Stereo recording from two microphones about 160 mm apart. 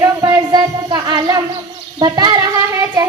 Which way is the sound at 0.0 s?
20° right (ahead or behind).